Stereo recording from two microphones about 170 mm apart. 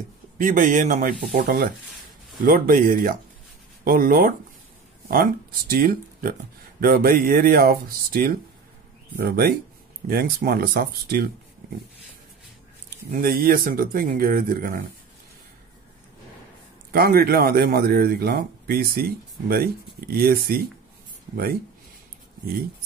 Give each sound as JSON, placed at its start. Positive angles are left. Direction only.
{"t": 0.4, "sound": "a man's voice", "side_deg": -50}
{"t": 13.1, "sound": "a man's voice", "side_deg": -60}
{"t": 16.9, "sound": "a man's voice", "side_deg": -65}